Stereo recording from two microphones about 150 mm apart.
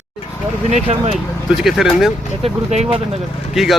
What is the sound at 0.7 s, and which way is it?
Speech, 45° right (ahead or behind).